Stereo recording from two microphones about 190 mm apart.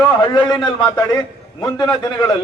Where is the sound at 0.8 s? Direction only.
15° left (ahead or behind).